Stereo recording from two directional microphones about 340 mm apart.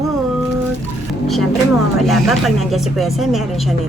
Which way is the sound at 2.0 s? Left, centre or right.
Centre.